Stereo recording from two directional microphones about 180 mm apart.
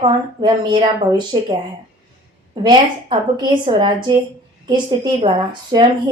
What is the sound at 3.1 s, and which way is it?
A woman's voice, 25° right (ahead or behind).